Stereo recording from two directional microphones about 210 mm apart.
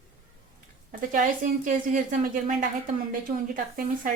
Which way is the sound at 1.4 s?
40° right (ahead or behind).